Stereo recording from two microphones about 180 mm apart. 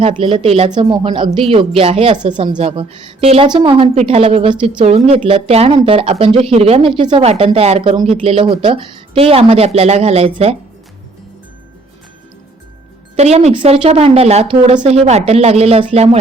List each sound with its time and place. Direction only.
0.0 s a woman's voice: 30° right (ahead or behind)
13.1 s a woman's voice: 35° right (ahead or behind)